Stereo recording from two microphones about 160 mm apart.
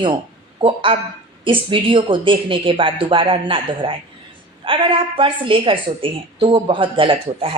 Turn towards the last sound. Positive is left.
turn(degrees=-35)  # may be behind; listen again after turning